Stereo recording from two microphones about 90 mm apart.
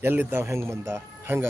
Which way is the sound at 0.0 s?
25° right (ahead or behind).